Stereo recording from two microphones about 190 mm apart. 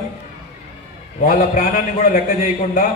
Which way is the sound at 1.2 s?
50° left (ahead or behind).